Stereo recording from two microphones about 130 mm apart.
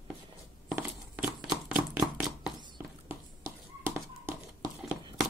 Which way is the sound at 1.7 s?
10° right (ahead or behind).